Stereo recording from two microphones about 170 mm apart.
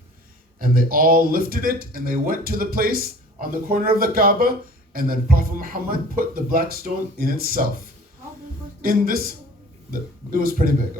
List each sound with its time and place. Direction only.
0.6 s a man's voice: 60° right (ahead or behind)
8.8 s a man's voice: 60° right (ahead or behind)